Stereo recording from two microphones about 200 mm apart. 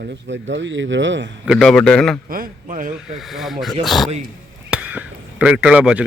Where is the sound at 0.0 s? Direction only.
65° right (ahead or behind).